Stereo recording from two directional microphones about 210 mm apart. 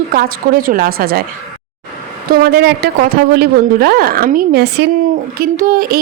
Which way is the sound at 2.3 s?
45° right (ahead or behind).